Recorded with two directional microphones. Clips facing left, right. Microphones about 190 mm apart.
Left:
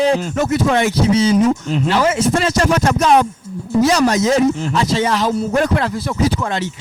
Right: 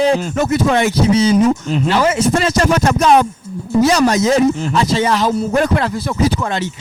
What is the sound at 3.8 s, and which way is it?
Speech, 5° right (ahead or behind).